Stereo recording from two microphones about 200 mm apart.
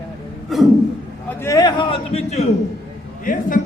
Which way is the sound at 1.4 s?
15° left (ahead or behind).